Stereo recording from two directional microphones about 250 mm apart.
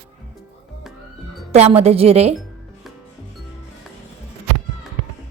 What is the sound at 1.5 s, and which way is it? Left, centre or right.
Speech, right.